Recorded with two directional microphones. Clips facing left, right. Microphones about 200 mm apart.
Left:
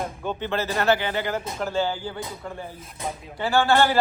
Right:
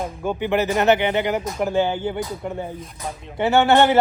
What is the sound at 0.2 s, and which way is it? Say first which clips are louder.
A man's voice: right 9 dB; 10° right (ahead or behind).